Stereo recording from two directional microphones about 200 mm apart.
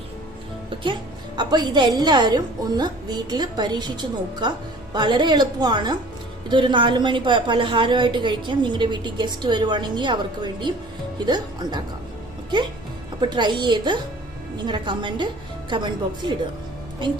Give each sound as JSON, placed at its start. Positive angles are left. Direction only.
{"t": 1.4, "sound": "a woman's voice", "side_deg": -20}
{"t": 13.3, "sound": "a woman's voice", "side_deg": -25}